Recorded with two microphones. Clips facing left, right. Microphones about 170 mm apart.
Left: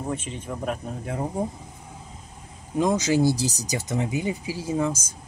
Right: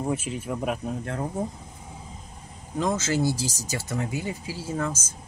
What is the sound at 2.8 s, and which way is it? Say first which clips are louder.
Speech: left 4 dB; 15° left (ahead or behind).